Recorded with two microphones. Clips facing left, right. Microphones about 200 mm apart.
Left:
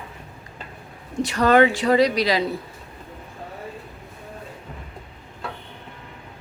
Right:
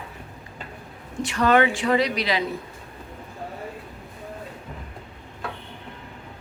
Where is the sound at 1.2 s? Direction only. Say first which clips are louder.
Left 3 dB; 40° left (ahead or behind).